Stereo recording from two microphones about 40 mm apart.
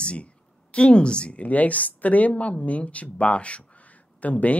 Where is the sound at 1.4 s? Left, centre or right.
Left.